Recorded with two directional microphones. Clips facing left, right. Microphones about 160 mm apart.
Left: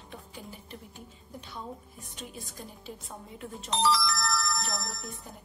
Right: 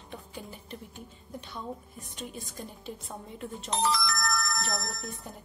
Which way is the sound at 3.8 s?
50° right (ahead or behind).